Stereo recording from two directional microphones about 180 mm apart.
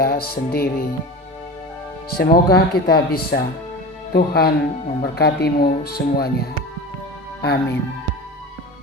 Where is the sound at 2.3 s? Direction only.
60° left (ahead or behind).